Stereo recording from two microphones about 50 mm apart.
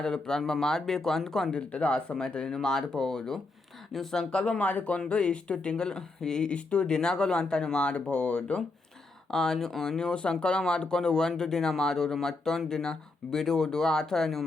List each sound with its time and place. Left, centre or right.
0.0 s speech: centre
1.5 s speech: left
9.3 s speech: centre
10.0 s speech: centre